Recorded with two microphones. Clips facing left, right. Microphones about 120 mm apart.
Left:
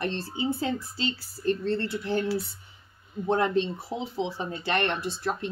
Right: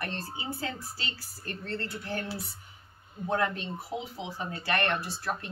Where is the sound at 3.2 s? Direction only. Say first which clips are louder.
Left 5 dB; 25° left (ahead or behind).